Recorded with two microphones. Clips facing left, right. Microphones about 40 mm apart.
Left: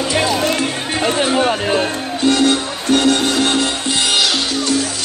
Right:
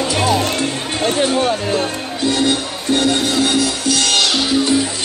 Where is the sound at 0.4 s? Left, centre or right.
Left.